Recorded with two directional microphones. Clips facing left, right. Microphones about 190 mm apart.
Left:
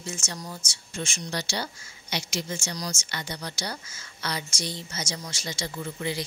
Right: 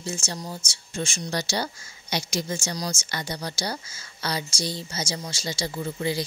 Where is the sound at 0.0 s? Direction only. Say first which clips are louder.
Right 4 dB; 30° right (ahead or behind).